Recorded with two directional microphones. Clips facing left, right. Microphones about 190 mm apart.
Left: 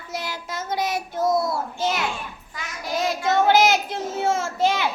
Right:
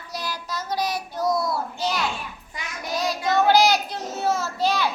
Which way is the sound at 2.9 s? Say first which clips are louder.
Left 1 dB; 25° left (ahead or behind).